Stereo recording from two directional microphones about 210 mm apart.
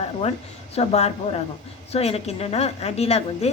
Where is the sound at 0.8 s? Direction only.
30° left (ahead or behind).